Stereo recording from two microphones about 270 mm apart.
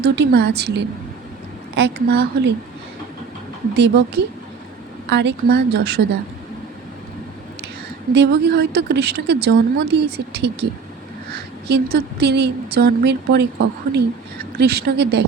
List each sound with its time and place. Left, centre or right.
0.0 s speech: right
3.8 s speech: right
8.1 s speech: right
14.5 s speech: right